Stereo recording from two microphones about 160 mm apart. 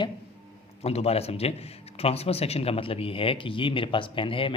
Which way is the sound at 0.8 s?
40° left (ahead or behind).